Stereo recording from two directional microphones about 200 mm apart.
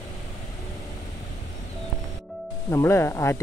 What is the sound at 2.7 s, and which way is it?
Speech, 15° left (ahead or behind).